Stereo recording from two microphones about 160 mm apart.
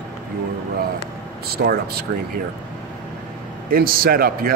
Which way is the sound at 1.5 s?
75° right (ahead or behind).